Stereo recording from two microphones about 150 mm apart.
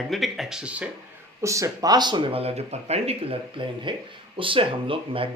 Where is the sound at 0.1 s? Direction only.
Centre (ahead or behind).